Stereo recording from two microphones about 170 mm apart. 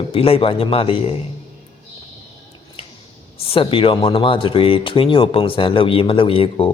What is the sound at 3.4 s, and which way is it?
Speech, 35° left (ahead or behind).